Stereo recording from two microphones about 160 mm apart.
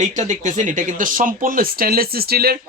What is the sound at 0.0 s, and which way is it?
Speech, 50° right (ahead or behind).